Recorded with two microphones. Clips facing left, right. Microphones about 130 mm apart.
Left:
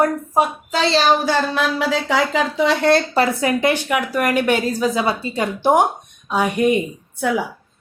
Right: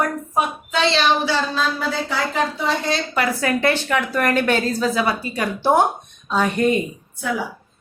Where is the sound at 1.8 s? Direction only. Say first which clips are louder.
Left 5 dB; 90° left.